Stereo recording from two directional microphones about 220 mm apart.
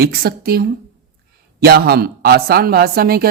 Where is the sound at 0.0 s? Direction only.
45° right (ahead or behind).